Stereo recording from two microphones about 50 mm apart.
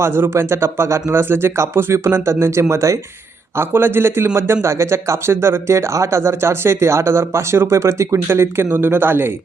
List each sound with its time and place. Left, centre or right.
0.0 s speech: right
1.1 s speech: right
3.6 s a man's voice: right
4.6 s speech: right
8.7 s a man's voice: right